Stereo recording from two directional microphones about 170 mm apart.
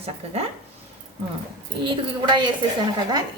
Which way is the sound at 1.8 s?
30° right (ahead or behind).